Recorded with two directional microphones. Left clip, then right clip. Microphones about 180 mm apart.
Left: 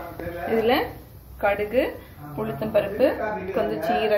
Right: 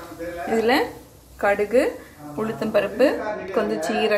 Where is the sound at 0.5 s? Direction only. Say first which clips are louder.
Right 1 dB; 15° right (ahead or behind).